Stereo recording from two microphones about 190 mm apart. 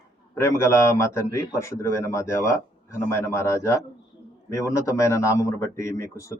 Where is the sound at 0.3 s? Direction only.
15° left (ahead or behind).